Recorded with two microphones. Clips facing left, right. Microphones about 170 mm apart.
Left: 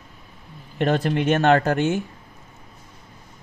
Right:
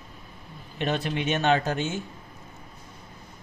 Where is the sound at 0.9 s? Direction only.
55° left (ahead or behind).